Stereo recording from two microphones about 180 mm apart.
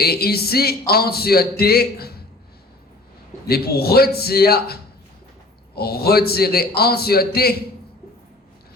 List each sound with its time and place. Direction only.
0.0 s speech: 60° left (ahead or behind)
3.4 s speech: 60° left (ahead or behind)